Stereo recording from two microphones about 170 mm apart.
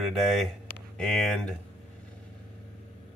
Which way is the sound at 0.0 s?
Centre (ahead or behind).